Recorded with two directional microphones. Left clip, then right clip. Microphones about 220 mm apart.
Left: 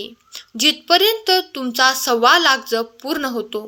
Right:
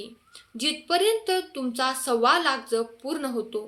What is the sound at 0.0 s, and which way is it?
Speech, 35° left (ahead or behind).